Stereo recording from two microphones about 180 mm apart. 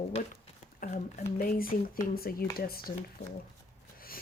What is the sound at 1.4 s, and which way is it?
Speech, 55° left (ahead or behind).